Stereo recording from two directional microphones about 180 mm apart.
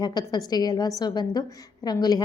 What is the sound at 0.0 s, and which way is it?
A woman's voice, 25° left (ahead or behind).